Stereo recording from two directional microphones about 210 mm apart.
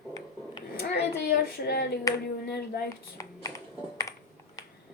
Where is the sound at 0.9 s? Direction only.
50° left (ahead or behind).